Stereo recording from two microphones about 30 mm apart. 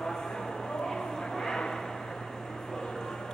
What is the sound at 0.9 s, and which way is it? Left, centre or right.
Vehicle, centre.